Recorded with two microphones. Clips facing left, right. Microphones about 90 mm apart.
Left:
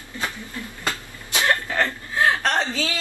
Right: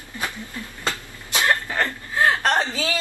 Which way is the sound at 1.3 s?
15° right (ahead or behind).